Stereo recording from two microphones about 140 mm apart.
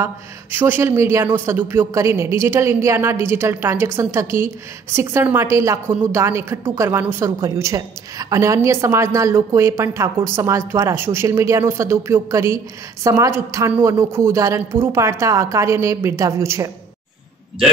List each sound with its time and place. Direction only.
0.0 s a woman's voice: 15° right (ahead or behind)